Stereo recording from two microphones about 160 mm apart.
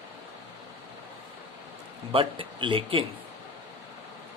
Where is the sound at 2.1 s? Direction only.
35° right (ahead or behind).